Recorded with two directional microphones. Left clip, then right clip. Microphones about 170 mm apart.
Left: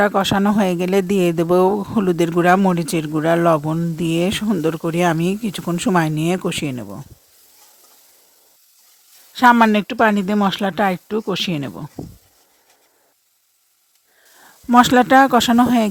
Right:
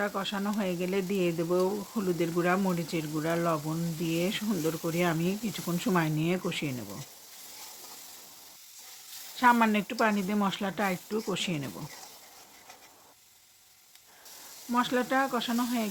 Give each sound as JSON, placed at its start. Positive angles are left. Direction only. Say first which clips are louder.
{"t": 0.0, "sound": "speech", "louder": "left 16 dB", "side_deg": 65}
{"t": 9.3, "sound": "speech", "louder": "left 11 dB", "side_deg": 55}
{"t": 14.7, "sound": "speech", "louder": "left 16 dB", "side_deg": 70}